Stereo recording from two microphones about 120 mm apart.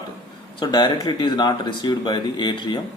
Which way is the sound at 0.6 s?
35° left (ahead or behind).